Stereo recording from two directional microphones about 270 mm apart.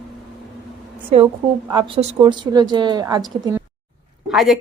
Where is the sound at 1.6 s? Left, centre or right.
Centre.